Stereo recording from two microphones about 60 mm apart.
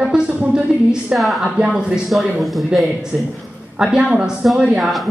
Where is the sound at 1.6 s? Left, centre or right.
Centre.